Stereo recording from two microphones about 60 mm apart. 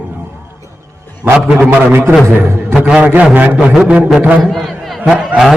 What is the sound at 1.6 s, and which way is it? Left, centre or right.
A man's voice, right.